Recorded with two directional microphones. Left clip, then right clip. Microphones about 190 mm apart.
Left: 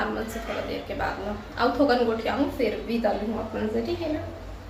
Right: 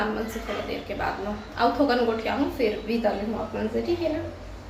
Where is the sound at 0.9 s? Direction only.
10° right (ahead or behind).